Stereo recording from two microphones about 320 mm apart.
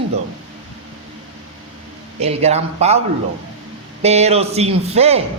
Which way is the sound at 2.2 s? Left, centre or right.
Centre.